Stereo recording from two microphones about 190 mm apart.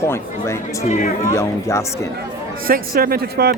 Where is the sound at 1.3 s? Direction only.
15° left (ahead or behind).